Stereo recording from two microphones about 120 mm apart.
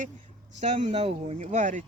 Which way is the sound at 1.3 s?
85° right.